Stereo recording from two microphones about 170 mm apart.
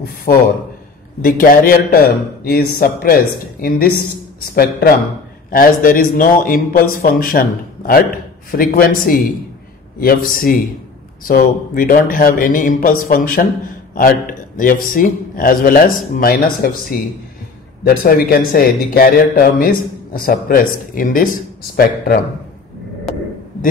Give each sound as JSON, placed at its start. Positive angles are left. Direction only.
{"t": 0.3, "sound": "a man's voice", "side_deg": 55}
{"t": 4.4, "sound": "a man's voice", "side_deg": 60}
{"t": 17.8, "sound": "a man's voice", "side_deg": 60}